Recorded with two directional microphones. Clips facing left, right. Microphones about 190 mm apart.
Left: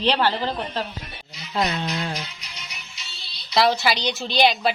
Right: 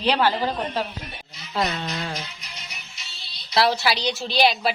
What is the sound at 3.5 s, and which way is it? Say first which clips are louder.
A woman's voice: left 1 dB; 5° right (ahead or behind).